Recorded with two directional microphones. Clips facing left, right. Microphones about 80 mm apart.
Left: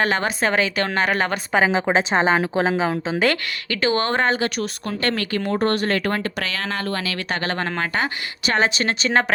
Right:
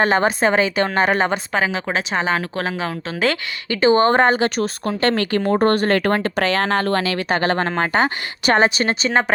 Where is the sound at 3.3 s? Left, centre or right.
Right.